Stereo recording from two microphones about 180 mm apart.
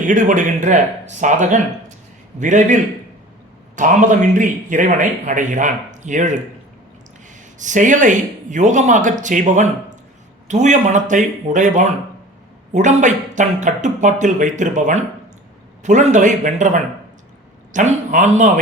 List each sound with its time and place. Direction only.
0.0 s speech: 45° right (ahead or behind)
3.8 s speech: 45° right (ahead or behind)
7.6 s speech: 45° right (ahead or behind)